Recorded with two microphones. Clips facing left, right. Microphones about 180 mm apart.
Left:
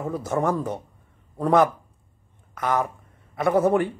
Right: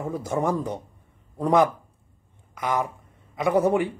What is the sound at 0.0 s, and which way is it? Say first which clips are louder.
A man's voice: left 1 dB; 15° right (ahead or behind).